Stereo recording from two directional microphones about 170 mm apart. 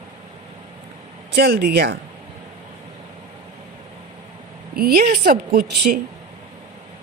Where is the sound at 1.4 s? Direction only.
65° right (ahead or behind).